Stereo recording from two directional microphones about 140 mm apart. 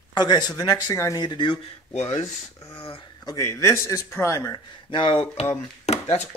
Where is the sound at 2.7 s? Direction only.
45° left (ahead or behind).